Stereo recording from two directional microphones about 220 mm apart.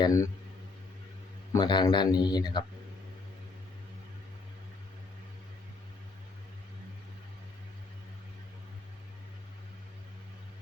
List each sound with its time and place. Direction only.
0.0 s speech: 15° left (ahead or behind)
1.5 s speech: 20° left (ahead or behind)